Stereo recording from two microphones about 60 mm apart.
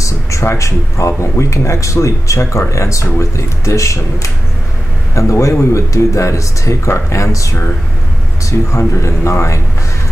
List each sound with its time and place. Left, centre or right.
0.0 s speech: left